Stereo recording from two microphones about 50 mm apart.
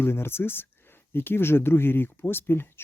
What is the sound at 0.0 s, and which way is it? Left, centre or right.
Speech, left.